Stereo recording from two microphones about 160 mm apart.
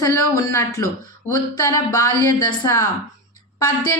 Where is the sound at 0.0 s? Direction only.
20° left (ahead or behind).